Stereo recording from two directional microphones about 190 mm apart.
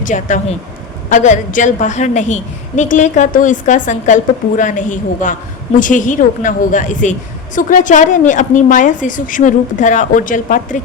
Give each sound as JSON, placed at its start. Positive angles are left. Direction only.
{"t": 0.0, "sound": "a woman's voice", "side_deg": 40}